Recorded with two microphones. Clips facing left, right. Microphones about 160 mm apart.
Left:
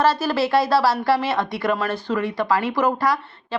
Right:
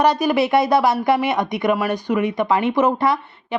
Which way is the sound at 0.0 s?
15° right (ahead or behind).